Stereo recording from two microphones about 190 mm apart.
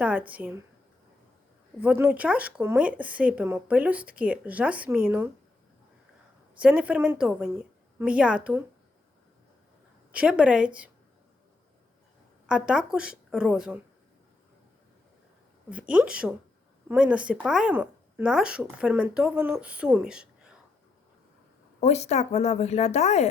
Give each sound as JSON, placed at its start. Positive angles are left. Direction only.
{"t": 0.0, "sound": "speech", "side_deg": -5}
{"t": 1.8, "sound": "speech", "side_deg": -5}
{"t": 6.6, "sound": "speech", "side_deg": -5}
{"t": 10.1, "sound": "speech", "side_deg": -5}
{"t": 12.5, "sound": "speech", "side_deg": -5}
{"t": 15.7, "sound": "speech", "side_deg": -5}
{"t": 21.8, "sound": "a woman's voice", "side_deg": 35}